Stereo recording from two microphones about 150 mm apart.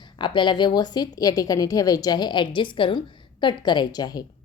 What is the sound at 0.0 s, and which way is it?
A woman's voice, 30° left (ahead or behind).